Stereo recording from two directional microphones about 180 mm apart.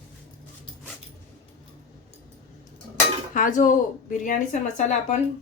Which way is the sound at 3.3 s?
50° left (ahead or behind).